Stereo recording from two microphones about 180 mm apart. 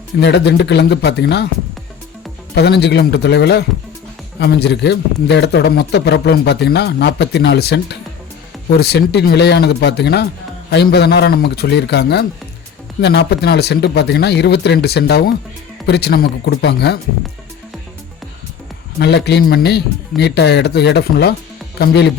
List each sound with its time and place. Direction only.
0.2 s a man's voice: 70° left (ahead or behind)
2.6 s a man's voice: 65° left (ahead or behind)
18.9 s a man's voice: 65° left (ahead or behind)